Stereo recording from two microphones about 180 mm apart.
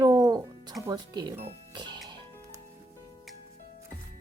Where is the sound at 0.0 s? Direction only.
20° right (ahead or behind).